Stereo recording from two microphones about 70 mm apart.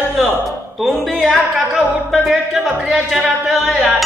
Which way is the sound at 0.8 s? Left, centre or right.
Centre.